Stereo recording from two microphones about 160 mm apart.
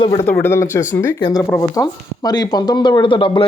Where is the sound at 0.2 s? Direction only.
10° left (ahead or behind).